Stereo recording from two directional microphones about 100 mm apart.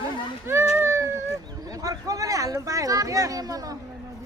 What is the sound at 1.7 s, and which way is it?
Speech, 35° right (ahead or behind).